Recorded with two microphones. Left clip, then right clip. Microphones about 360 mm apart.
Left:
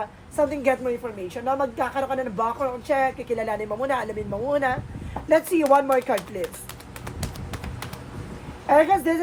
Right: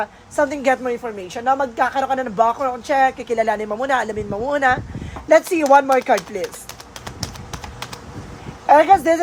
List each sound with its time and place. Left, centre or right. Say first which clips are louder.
0.3 s a woman's voice: right 4 dB; right
8.6 s a woman's voice: right 6 dB; right